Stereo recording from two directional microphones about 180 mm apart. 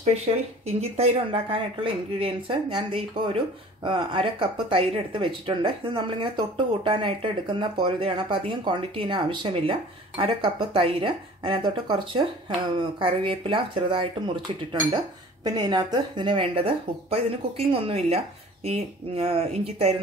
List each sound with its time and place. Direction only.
0.0 s speech: 35° right (ahead or behind)